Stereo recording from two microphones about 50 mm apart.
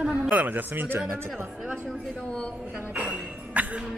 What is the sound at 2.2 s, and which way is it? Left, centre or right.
Speech, left.